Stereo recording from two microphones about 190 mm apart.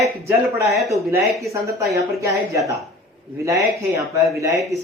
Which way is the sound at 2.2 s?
15° right (ahead or behind).